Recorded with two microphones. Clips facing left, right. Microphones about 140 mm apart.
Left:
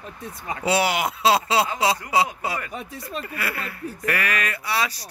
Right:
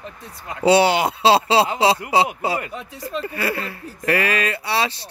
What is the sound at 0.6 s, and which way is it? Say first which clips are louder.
Speech: right 7 dB; 30° right (ahead or behind).